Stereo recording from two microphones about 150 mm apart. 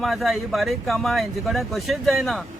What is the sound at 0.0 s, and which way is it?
Speech, centre (ahead or behind).